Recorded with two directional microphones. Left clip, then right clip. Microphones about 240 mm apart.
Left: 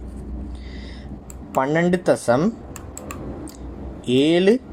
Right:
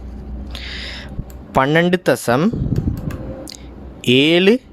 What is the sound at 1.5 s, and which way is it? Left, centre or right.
Speech, right.